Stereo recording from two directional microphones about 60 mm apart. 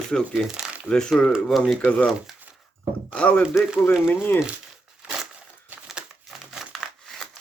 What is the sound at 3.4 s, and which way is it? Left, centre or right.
Speech, centre.